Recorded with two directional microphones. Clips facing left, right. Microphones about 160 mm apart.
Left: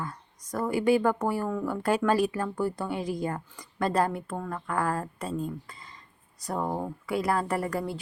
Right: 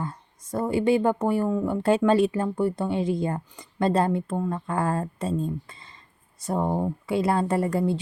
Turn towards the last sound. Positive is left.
turn(degrees=-25)  # may be behind; listen again after turning